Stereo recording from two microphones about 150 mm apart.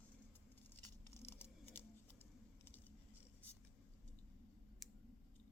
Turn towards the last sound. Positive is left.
turn(degrees=0)  # may be behind; listen again after turning